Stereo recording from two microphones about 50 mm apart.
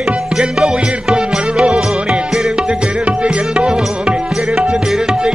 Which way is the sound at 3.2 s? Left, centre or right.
Right.